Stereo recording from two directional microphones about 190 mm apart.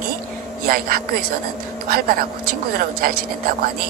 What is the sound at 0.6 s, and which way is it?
Speech, 50° right (ahead or behind).